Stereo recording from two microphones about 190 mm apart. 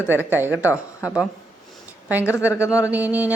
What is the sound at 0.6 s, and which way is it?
Speech, 15° left (ahead or behind).